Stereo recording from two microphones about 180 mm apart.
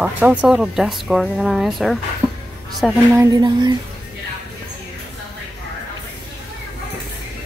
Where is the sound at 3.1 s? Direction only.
20° right (ahead or behind).